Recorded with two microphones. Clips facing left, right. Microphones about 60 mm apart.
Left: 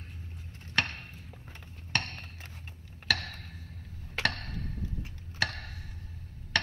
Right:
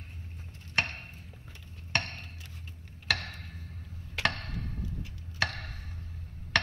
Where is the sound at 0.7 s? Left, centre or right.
Right.